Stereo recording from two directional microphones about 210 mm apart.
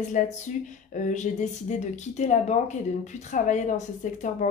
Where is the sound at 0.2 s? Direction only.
40° left (ahead or behind).